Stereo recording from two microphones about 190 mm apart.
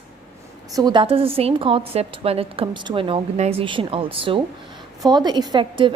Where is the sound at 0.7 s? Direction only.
25° right (ahead or behind).